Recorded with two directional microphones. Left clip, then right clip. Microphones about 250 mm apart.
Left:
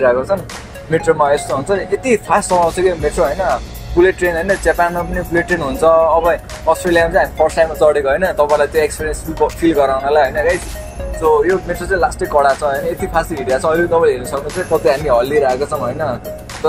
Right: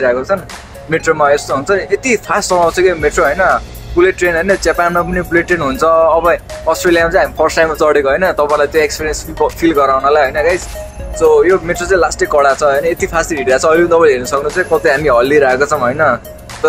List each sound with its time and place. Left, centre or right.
0.0 s speech: centre
11.7 s speech: right